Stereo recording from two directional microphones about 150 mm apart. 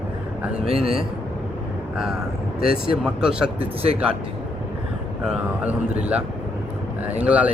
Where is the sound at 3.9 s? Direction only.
45° right (ahead or behind).